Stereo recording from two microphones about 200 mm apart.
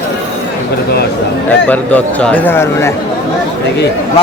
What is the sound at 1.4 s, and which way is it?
Speech, 10° left (ahead or behind).